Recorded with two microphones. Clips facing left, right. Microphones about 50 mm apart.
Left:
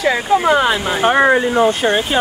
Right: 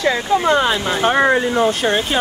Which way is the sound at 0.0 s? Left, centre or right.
Centre.